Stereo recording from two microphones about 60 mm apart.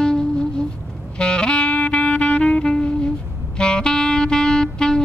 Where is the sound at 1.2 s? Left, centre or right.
Centre.